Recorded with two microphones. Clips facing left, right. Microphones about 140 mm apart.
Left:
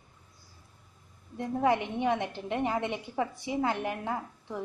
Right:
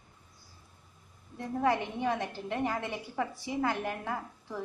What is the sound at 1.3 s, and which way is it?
A woman's voice, 20° left (ahead or behind).